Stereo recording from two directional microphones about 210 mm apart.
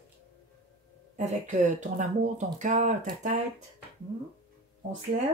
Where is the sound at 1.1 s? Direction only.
35° right (ahead or behind).